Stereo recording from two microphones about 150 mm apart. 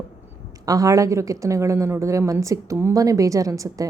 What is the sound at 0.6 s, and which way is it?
Speech, 25° right (ahead or behind).